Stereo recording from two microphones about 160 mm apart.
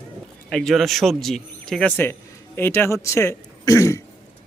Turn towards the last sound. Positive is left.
turn(degrees=20)  # may be behind; listen again after turning